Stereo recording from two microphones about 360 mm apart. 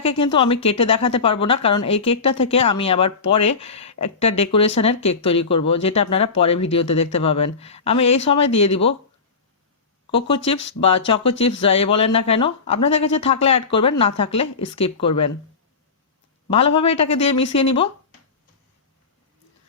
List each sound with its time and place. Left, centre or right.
0.0 s a woman's voice: centre
10.1 s a woman's voice: centre
16.5 s a woman's voice: centre